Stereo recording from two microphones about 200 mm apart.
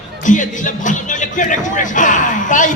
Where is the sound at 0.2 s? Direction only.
40° left (ahead or behind).